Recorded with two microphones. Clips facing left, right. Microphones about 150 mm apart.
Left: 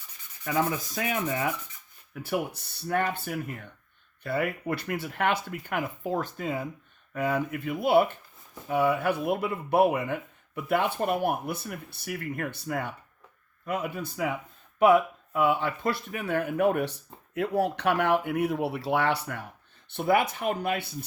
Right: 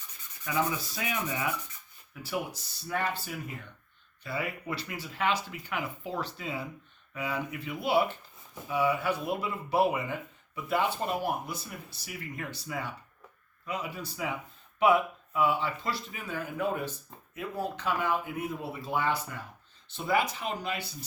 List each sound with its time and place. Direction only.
0.4 s speech: 50° left (ahead or behind)